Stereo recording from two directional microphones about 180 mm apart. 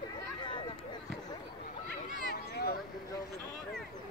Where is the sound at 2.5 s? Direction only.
65° left (ahead or behind).